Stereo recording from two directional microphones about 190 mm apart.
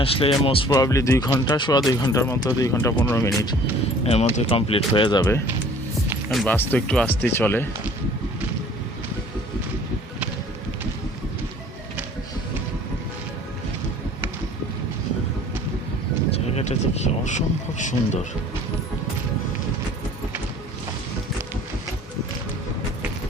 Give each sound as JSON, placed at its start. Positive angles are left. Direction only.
{"t": 0.0, "sound": "speech", "side_deg": 30}
{"t": 4.0, "sound": "speech", "side_deg": 35}
{"t": 6.3, "sound": "speech", "side_deg": 5}
{"t": 16.3, "sound": "a sound", "side_deg": 35}